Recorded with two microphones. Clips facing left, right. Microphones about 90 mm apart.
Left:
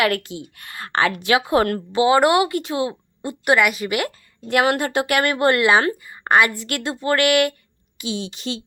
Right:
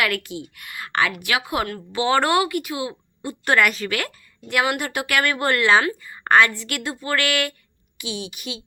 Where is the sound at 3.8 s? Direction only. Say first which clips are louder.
Left 4 dB; 20° left (ahead or behind).